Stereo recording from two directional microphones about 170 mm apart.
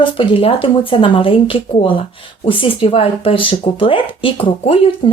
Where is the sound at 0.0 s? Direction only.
30° left (ahead or behind).